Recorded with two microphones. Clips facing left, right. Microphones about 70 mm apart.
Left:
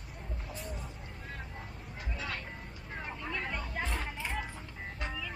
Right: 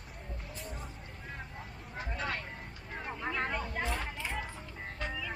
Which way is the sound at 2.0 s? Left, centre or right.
Right.